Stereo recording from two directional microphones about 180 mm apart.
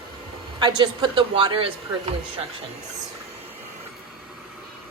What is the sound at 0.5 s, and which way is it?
A man's voice, 25° right (ahead or behind).